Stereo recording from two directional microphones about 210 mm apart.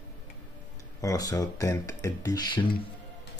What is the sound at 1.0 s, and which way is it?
Speech, 15° left (ahead or behind).